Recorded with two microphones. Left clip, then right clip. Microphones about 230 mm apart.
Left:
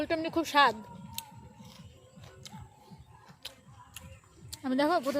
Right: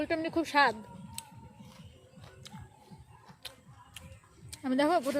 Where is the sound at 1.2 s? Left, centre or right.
Centre.